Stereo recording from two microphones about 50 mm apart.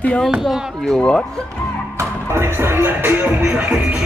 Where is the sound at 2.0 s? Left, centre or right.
Right.